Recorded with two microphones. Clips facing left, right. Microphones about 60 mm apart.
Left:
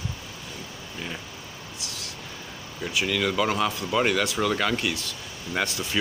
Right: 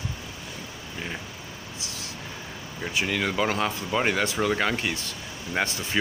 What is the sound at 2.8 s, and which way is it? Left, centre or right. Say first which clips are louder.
Speech: left 1 dB; right.